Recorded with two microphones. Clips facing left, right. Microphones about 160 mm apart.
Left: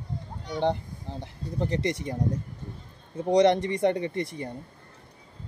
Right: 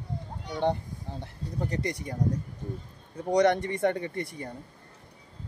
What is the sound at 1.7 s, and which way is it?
Speech, 25° left (ahead or behind).